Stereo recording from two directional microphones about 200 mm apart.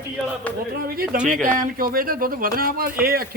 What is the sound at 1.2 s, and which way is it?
Speech, 40° right (ahead or behind).